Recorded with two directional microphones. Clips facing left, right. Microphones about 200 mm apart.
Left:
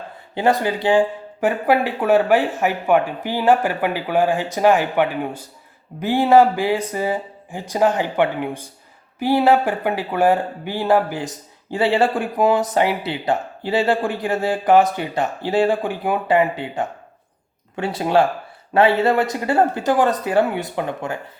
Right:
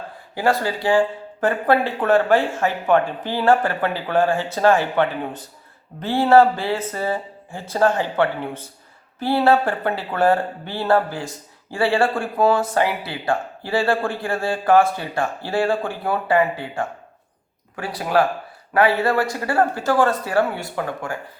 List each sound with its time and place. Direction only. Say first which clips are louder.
0.3 s speech: left 2 dB; 20° left (ahead or behind)